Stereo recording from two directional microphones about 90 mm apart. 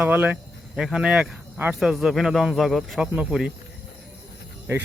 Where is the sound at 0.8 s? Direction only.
5° right (ahead or behind).